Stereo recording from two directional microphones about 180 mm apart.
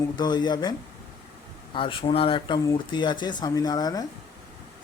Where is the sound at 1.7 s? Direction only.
30° left (ahead or behind).